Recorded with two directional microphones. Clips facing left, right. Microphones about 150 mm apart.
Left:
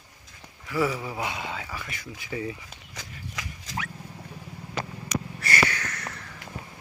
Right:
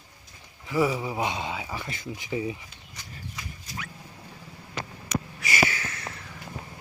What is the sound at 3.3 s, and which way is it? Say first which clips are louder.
Pig: left 6 dB; 90° left.